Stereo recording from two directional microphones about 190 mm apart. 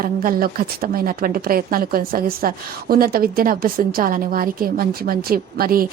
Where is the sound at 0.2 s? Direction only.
50° right (ahead or behind).